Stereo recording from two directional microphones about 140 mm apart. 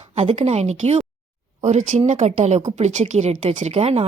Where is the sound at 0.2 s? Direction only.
50° right (ahead or behind).